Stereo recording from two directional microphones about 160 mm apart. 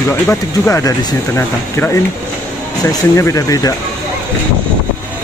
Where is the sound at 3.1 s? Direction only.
20° left (ahead or behind).